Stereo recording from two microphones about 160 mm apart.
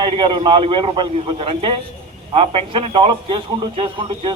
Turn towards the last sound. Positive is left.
turn(degrees=-30)  # may be behind; listen again after turning